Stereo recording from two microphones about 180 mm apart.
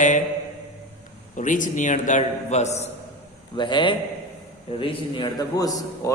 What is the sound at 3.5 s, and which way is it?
A man's voice, 25° left (ahead or behind).